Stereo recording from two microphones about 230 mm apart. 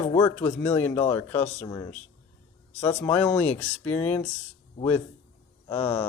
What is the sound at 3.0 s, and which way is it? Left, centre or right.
Speech, centre.